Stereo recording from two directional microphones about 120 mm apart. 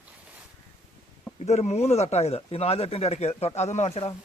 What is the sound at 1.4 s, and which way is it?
Speech, 65° left (ahead or behind).